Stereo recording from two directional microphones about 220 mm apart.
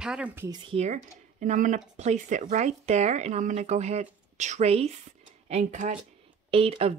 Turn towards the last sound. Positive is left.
turn(degrees=-25)  # may be behind; listen again after turning